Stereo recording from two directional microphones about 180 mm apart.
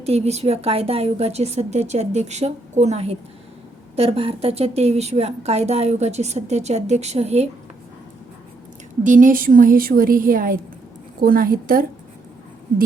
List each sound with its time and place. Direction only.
0.0 s a woman's voice: 35° right (ahead or behind)
9.0 s a woman's voice: 45° right (ahead or behind)